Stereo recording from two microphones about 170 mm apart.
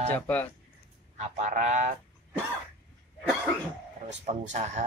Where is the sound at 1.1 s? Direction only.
40° right (ahead or behind).